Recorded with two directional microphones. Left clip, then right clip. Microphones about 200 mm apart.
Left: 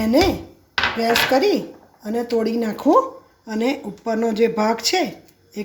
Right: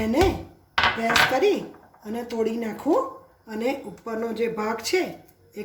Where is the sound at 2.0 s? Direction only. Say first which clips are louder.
Left 6 dB; 35° left (ahead or behind).